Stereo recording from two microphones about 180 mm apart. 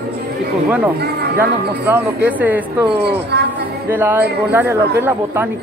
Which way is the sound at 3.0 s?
65° right (ahead or behind).